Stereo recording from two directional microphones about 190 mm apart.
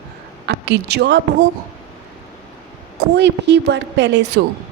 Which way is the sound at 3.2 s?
65° right (ahead or behind).